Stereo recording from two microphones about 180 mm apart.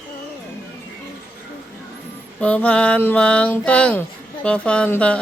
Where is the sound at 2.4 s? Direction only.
10° left (ahead or behind).